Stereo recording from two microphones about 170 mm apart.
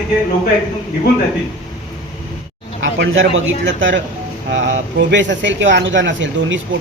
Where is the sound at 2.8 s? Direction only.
90° right.